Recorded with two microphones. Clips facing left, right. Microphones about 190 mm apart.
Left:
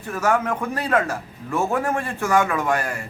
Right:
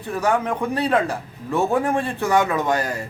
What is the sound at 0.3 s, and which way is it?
A man's voice, 15° right (ahead or behind).